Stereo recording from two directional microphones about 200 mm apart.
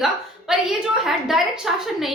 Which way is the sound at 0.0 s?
Centre (ahead or behind).